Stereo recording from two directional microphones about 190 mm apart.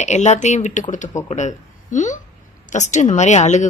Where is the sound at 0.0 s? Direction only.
35° left (ahead or behind).